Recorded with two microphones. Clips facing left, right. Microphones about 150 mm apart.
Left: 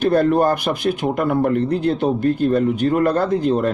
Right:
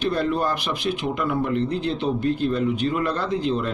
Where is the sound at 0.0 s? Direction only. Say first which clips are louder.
Left 7 dB; 50° left (ahead or behind).